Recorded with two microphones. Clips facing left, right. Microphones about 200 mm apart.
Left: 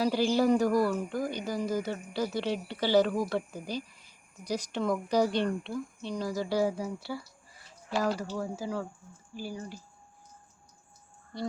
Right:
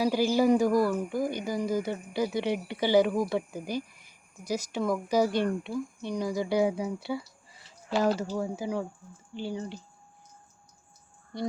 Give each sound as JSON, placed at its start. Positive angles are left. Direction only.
{"t": 0.0, "sound": "speech", "side_deg": -10}